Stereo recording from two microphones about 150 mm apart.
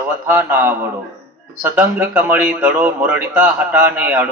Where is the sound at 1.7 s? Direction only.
15° right (ahead or behind).